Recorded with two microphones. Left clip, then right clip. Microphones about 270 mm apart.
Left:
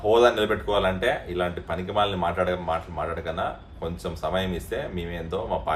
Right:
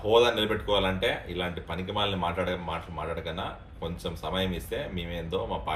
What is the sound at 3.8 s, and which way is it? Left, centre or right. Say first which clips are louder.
Speech: left 4 dB; centre.